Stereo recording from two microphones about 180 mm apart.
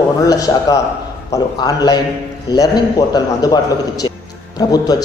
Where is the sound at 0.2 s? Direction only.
20° left (ahead or behind).